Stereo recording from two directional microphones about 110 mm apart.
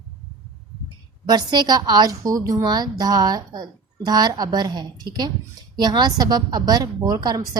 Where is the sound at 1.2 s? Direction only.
40° right (ahead or behind).